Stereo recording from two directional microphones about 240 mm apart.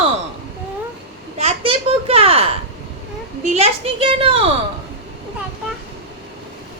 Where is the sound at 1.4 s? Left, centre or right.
Right.